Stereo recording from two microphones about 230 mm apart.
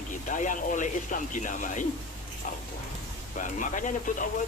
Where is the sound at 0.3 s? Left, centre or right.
Left.